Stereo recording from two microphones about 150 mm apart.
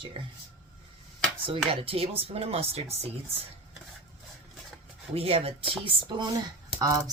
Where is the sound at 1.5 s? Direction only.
40° right (ahead or behind).